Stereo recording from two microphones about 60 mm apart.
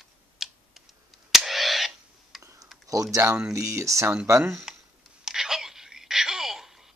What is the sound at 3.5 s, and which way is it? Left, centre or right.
A man's voice, right.